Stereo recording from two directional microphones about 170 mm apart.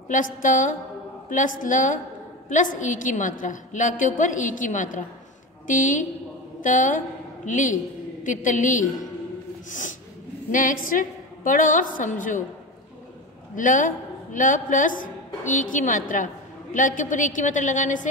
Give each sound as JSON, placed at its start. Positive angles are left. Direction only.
{"t": 0.1, "sound": "a woman's voice", "side_deg": 50}
{"t": 13.6, "sound": "a woman's voice", "side_deg": 50}